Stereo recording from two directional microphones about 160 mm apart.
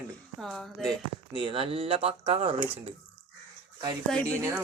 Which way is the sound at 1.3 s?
35° right (ahead or behind).